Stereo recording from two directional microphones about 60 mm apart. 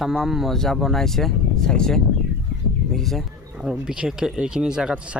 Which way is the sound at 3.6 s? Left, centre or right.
Centre.